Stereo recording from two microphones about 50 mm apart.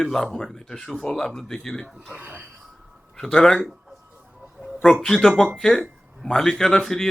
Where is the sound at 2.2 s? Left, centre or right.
Right.